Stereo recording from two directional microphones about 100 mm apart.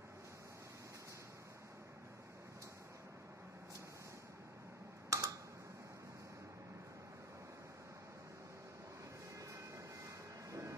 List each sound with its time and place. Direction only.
5.1 s typing: 30° right (ahead or behind)